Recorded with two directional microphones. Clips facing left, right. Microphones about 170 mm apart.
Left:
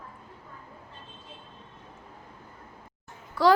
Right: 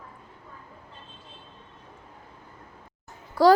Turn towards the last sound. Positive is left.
turn(degrees=-40)  # may be behind; listen again after turning